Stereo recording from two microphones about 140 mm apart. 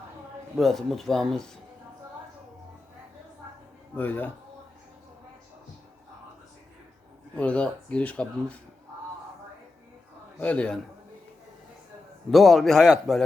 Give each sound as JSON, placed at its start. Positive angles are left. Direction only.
{"t": 0.5, "sound": "speech", "side_deg": 0}
{"t": 3.9, "sound": "speech", "side_deg": 15}
{"t": 7.3, "sound": "speech", "side_deg": 10}
{"t": 10.4, "sound": "speech", "side_deg": 10}
{"t": 12.3, "sound": "speech", "side_deg": 0}